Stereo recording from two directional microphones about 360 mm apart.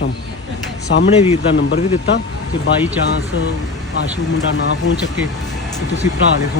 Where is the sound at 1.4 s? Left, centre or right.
Left.